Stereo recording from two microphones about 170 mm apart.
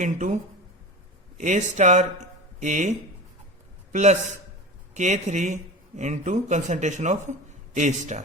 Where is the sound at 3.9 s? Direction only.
45° right (ahead or behind).